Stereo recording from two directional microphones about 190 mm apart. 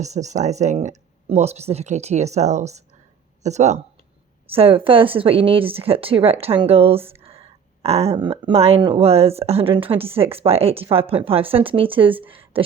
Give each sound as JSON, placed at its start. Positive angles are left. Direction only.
{"t": 0.0, "sound": "a woman's voice", "side_deg": -35}